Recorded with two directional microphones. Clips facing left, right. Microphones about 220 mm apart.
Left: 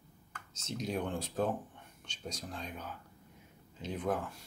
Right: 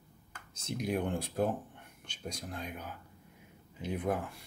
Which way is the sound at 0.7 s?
15° right (ahead or behind).